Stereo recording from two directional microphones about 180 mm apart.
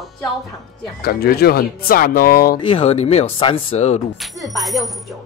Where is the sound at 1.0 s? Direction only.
60° left (ahead or behind).